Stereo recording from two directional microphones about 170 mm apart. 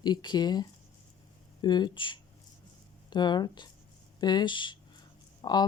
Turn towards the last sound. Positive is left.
turn(degrees=25)  # may be behind; listen again after turning